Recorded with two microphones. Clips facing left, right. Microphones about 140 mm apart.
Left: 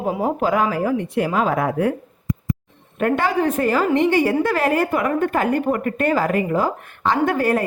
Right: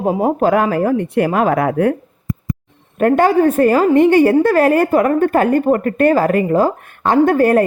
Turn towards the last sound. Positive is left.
turn(degrees=-45)  # may be behind; listen again after turning